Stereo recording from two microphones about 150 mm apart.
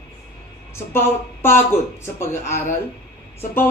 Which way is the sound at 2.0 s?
15° left (ahead or behind).